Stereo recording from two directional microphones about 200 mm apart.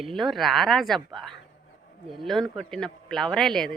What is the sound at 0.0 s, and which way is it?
A man's voice, centre (ahead or behind).